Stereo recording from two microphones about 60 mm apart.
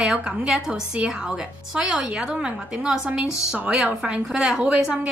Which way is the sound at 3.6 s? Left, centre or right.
Right.